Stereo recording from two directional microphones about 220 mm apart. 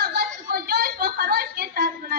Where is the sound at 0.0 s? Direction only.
45° right (ahead or behind).